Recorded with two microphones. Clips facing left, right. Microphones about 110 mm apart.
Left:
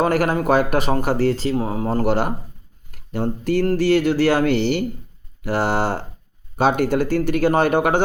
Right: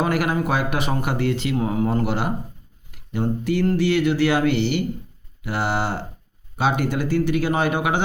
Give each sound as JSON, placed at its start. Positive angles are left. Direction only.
{"t": 0.0, "sound": "speech", "side_deg": 45}